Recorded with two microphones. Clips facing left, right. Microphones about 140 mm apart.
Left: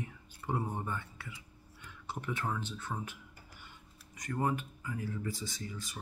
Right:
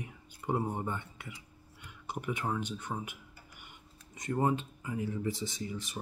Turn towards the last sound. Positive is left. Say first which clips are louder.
# right 4 dB
turn(degrees=-20)  # may be behind; listen again after turning